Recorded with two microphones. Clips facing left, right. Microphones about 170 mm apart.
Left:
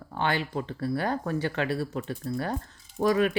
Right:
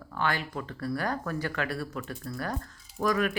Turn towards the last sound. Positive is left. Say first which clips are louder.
# left 4 dB
turn(degrees=30)  # may be behind; listen again after turning